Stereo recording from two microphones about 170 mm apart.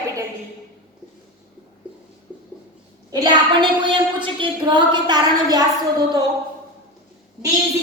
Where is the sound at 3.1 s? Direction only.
25° right (ahead or behind).